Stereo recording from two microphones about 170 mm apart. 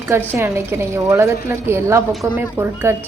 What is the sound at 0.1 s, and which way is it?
A woman's voice, 15° right (ahead or behind).